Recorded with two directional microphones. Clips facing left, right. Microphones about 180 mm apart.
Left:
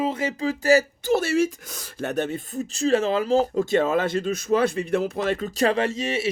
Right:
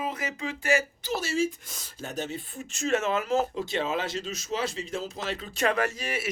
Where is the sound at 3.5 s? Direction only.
50° left (ahead or behind).